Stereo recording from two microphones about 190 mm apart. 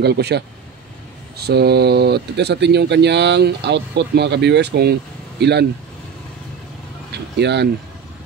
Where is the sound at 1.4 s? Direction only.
60° right (ahead or behind).